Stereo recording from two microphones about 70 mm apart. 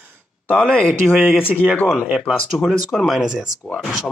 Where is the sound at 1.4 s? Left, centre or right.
Left.